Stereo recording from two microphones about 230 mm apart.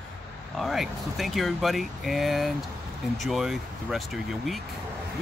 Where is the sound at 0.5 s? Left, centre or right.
Centre.